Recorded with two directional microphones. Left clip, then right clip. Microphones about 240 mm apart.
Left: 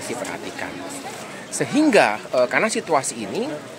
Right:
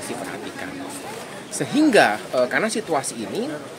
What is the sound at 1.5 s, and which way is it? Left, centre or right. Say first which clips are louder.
Speech: even; centre.